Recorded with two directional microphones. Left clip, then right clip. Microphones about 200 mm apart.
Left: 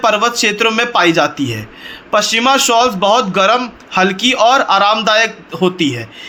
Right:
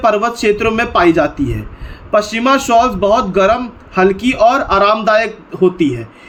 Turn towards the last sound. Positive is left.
turn(degrees=-5)  # may be behind; listen again after turning